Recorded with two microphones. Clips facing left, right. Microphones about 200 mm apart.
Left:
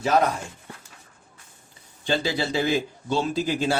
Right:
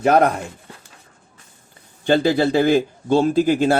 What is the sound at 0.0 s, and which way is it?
Speech, 60° right (ahead or behind).